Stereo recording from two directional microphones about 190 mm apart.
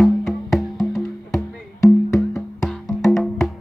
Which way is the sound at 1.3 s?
15° left (ahead or behind).